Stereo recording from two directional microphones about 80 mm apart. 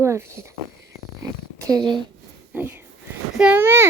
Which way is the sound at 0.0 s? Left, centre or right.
Right.